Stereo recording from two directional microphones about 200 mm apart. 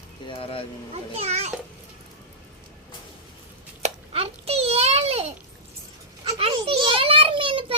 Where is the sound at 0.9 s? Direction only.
30° right (ahead or behind).